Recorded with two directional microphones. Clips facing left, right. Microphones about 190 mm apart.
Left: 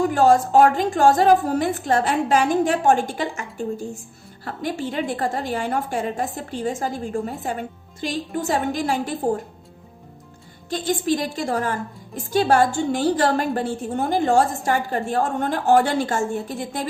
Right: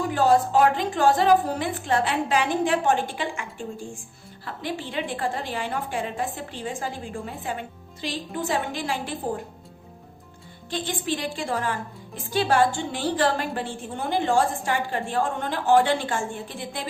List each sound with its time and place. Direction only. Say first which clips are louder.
0.1 s a woman's voice: left 4 dB; 45° left (ahead or behind)
10.7 s a woman's voice: left 6 dB; 45° left (ahead or behind)